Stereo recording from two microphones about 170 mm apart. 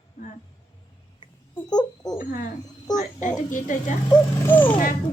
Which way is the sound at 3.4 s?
50° left (ahead or behind).